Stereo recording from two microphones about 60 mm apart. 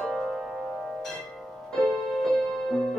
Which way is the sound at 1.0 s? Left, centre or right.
Centre.